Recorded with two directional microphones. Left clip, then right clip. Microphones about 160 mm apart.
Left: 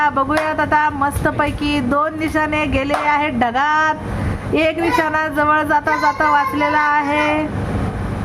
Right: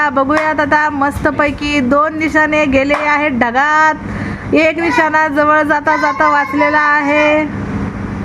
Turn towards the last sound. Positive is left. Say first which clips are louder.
# right 5 dB
turn(degrees=-25)  # may be behind; listen again after turning